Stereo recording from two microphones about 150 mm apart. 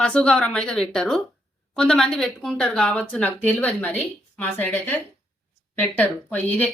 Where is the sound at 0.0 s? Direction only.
5° left (ahead or behind).